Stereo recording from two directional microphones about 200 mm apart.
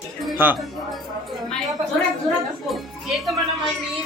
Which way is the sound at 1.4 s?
Centre (ahead or behind).